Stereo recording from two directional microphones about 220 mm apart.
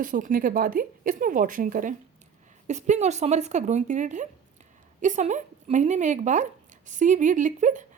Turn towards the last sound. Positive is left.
turn(degrees=-35)  # may be behind; listen again after turning